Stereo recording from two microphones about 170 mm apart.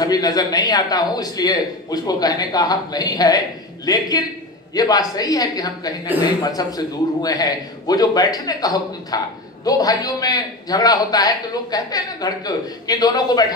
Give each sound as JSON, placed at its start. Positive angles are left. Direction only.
{"t": 0.0, "sound": "a man's voice", "side_deg": 20}